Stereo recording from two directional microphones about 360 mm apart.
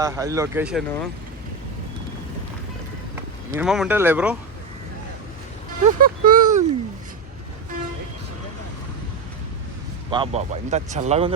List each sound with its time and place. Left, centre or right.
0.0 s speech: centre
3.5 s speech: centre
5.8 s speech: right
10.1 s speech: centre